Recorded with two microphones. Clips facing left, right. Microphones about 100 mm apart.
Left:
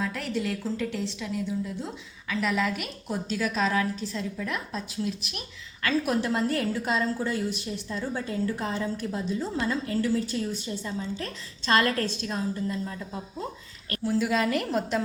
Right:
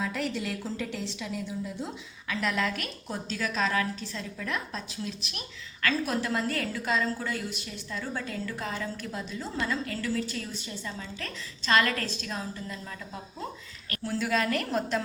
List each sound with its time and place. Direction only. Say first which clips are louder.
0.0 s a woman's voice: left 2 dB; centre (ahead or behind)
5.8 s a woman's voice: left 3 dB; 20° left (ahead or behind)
14.0 s a woman's voice: left 3 dB; 10° left (ahead or behind)